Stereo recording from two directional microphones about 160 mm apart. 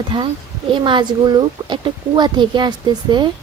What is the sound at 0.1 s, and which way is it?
Speech, 30° right (ahead or behind).